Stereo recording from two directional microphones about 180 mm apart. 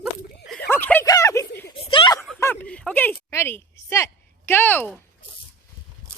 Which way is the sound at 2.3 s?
10° left (ahead or behind).